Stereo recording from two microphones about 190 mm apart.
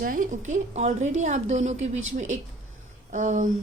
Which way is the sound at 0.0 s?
45° right (ahead or behind).